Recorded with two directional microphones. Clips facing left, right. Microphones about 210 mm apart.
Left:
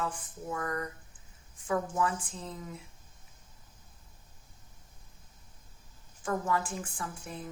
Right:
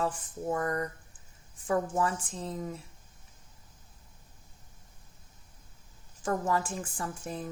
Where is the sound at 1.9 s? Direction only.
35° right (ahead or behind).